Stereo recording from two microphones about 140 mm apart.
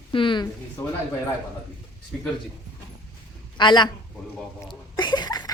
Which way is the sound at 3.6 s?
35° left (ahead or behind).